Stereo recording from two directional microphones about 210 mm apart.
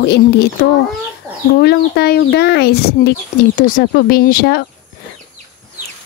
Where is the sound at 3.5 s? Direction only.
40° left (ahead or behind).